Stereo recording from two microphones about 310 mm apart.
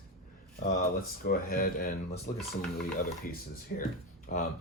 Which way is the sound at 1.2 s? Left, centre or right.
Left.